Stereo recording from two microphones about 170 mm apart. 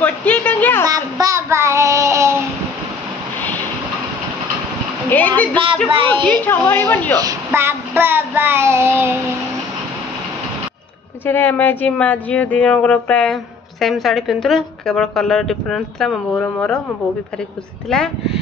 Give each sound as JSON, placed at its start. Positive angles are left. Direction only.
{"t": 0.0, "sound": "a sound", "side_deg": 10}
{"t": 0.8, "sound": "child singing", "side_deg": -20}
{"t": 5.1, "sound": "a woman's voice", "side_deg": 10}
{"t": 5.9, "sound": "a woman's voice", "side_deg": -30}
{"t": 6.4, "sound": "a woman's voice", "side_deg": 10}
{"t": 7.2, "sound": "child singing", "side_deg": -20}
{"t": 11.2, "sound": "speech", "side_deg": 10}
{"t": 17.8, "sound": "speech", "side_deg": 5}